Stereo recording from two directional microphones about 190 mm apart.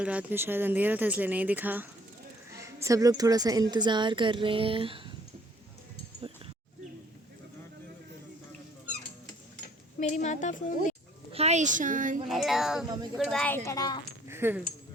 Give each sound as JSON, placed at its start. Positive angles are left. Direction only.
{"t": 0.0, "sound": "a woman's voice", "side_deg": -5}
{"t": 10.0, "sound": "speech", "side_deg": 40}
{"t": 11.3, "sound": "a woman's voice", "side_deg": -35}
{"t": 12.3, "sound": "speech", "side_deg": 0}
{"t": 13.7, "sound": "speech", "side_deg": 20}
{"t": 14.3, "sound": "a sound", "side_deg": -10}